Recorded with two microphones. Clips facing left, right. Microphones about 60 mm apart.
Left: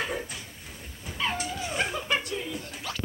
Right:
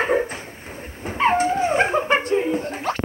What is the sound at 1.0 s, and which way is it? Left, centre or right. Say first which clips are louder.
Dog: right 13 dB; right.